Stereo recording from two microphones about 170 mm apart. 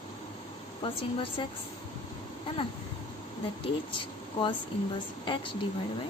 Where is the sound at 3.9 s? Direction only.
30° left (ahead or behind).